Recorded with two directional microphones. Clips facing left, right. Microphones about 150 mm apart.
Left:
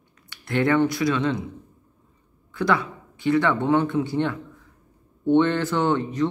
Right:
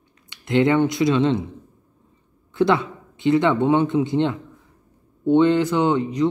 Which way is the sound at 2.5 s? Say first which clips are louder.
Right 4 dB; 25° right (ahead or behind).